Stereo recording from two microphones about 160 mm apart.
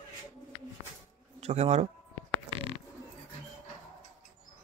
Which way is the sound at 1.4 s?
40° right (ahead or behind).